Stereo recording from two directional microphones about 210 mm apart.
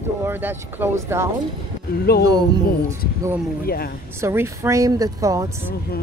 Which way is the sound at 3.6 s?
45° left (ahead or behind).